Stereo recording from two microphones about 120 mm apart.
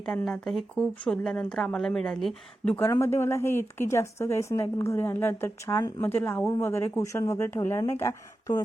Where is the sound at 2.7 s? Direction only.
20° left (ahead or behind).